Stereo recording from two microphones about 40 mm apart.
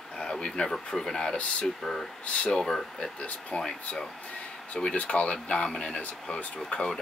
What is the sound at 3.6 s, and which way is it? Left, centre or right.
Speech, centre.